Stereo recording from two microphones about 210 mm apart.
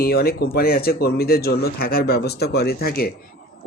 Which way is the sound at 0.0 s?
45° left (ahead or behind).